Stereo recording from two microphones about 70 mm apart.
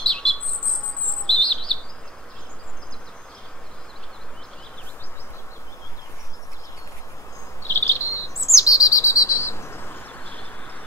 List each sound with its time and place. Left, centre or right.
0.0 s chirp: centre
7.6 s insect: left